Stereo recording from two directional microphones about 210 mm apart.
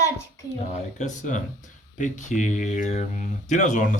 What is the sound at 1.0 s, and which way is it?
Speech, 35° left (ahead or behind).